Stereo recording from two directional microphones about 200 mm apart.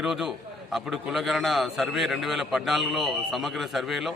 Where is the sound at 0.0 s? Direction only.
Centre (ahead or behind).